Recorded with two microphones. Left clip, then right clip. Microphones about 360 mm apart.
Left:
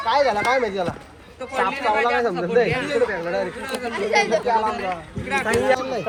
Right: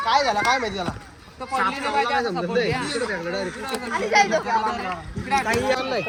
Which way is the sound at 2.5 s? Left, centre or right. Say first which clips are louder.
Left 6 dB; right.